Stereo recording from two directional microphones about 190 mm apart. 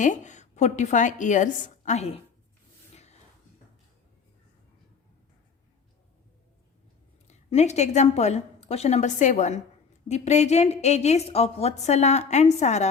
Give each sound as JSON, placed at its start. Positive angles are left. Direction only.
{"t": 0.0, "sound": "a woman's voice", "side_deg": 40}
{"t": 2.9, "sound": "a sound", "side_deg": 35}
{"t": 7.3, "sound": "a woman's voice", "side_deg": 35}